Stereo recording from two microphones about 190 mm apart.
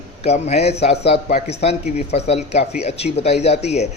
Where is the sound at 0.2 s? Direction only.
35° left (ahead or behind).